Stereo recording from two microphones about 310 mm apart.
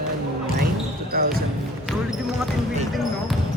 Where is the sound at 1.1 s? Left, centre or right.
Right.